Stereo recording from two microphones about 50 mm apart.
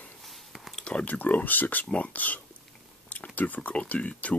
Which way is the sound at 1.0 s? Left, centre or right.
Left.